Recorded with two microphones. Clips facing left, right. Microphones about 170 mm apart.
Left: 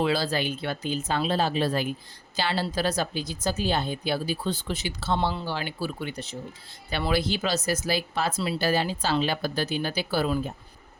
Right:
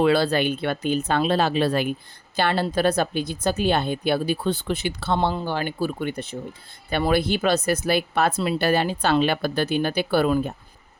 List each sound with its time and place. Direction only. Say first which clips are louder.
0.0 s speech: right 6 dB; 60° right (ahead or behind)